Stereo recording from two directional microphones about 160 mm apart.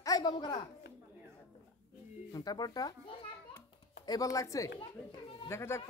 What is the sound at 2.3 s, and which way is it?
Speech, 25° left (ahead or behind).